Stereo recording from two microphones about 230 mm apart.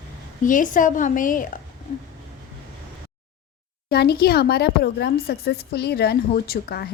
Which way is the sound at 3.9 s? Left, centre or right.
Left.